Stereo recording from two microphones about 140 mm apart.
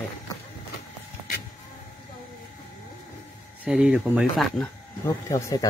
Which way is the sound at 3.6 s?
5° right (ahead or behind).